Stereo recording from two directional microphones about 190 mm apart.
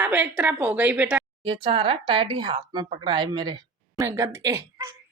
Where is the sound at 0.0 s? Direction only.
10° right (ahead or behind).